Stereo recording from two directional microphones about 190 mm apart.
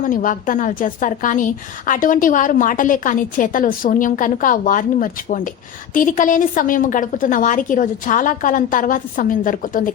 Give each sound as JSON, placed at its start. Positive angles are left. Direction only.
{"t": 0.0, "sound": "a woman's voice", "side_deg": 45}